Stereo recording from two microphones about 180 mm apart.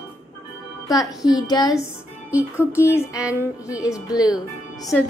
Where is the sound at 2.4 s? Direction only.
10° right (ahead or behind).